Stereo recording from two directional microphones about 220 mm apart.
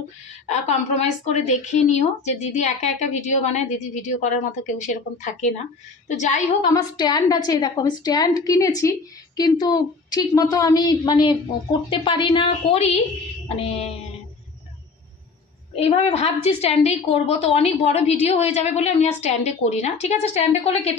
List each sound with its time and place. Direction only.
0.5 s a woman's voice: 30° left (ahead or behind)
6.6 s a woman's voice: 20° left (ahead or behind)
15.7 s a woman's voice: 25° left (ahead or behind)